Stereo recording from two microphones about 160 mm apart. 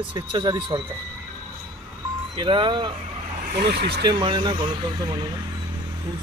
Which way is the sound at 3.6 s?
90° right.